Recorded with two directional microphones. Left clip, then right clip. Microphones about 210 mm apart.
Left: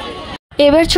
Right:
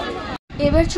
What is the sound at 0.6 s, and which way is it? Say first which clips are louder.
Speech: left 8 dB; 40° left (ahead or behind).